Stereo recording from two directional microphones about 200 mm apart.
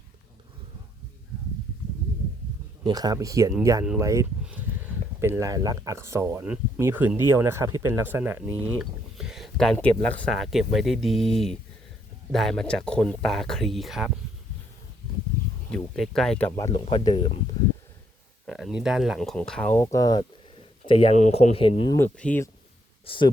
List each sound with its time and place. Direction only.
2.8 s speech: 20° right (ahead or behind); by 14.1 s centre (ahead or behind)
15.7 s speech: centre (ahead or behind)
16.5 s speech: 20° left (ahead or behind)
18.4 s speech: centre (ahead or behind); by 21.9 s 25° left (ahead or behind)
21.9 s speech: 10° left (ahead or behind)
23.0 s speech: 25° left (ahead or behind)